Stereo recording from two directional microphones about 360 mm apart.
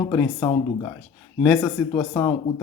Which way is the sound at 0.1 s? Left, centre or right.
Centre.